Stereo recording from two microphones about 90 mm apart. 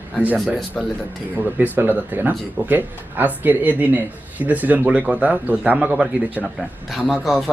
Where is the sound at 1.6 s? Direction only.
20° right (ahead or behind).